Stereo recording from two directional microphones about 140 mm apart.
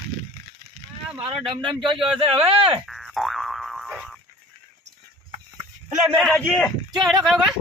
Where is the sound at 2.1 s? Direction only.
45° right (ahead or behind).